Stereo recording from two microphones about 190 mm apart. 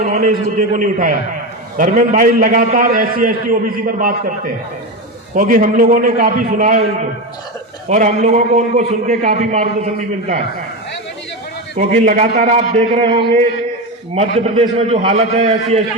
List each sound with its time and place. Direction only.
0.0 s a man's voice: 45° right (ahead or behind)
7.9 s a man's voice: 40° right (ahead or behind)
11.8 s a man's voice: 45° right (ahead or behind)